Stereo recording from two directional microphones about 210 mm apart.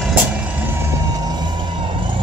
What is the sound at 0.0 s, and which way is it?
Vehicle, 5° right (ahead or behind).